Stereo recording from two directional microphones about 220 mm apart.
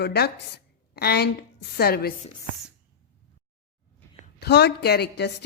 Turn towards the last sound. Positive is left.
turn(degrees=50)  # may be behind; listen again after turning